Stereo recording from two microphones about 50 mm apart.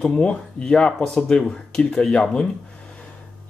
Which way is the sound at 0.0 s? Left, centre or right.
Centre.